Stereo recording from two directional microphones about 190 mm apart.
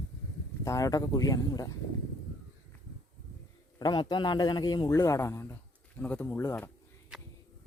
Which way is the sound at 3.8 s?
20° left (ahead or behind).